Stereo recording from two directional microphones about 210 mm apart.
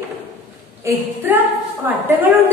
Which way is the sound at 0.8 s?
10° right (ahead or behind).